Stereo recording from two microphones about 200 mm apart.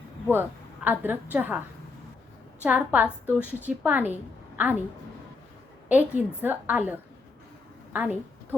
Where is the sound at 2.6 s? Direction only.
5° right (ahead or behind).